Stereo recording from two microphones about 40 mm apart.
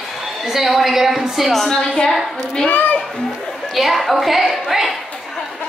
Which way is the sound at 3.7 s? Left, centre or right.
Centre.